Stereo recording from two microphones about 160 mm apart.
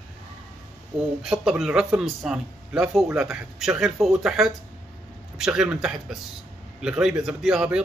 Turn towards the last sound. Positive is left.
turn(degrees=-5)  # may be behind; listen again after turning